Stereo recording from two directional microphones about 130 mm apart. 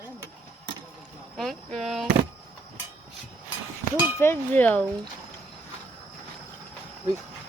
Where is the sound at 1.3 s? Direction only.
Centre (ahead or behind).